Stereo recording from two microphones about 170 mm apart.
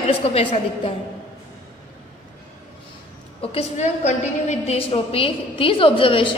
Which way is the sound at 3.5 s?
40° left (ahead or behind).